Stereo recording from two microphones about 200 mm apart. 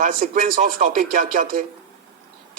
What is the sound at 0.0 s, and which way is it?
A man's voice, 45° right (ahead or behind).